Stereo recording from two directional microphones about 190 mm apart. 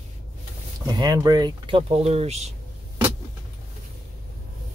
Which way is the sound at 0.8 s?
25° right (ahead or behind).